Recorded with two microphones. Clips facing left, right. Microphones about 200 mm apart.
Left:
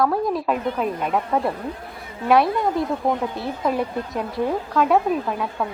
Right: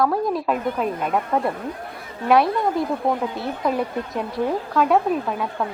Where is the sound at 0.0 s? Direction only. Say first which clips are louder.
Even; centre (ahead or behind).